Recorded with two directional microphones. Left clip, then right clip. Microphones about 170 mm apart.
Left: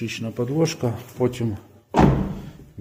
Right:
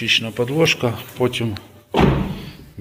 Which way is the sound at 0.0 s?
35° left (ahead or behind).